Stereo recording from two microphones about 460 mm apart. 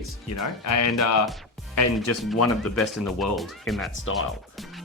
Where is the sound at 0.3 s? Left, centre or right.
Left.